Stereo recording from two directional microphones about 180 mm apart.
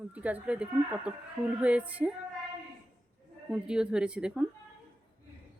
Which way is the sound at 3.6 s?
5° right (ahead or behind).